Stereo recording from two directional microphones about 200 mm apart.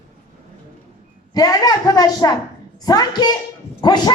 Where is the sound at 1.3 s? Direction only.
20° left (ahead or behind).